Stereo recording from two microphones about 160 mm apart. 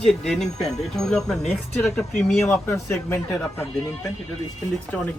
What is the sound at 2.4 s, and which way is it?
Speech, 15° left (ahead or behind).